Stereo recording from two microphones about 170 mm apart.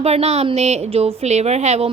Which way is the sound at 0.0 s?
40° right (ahead or behind).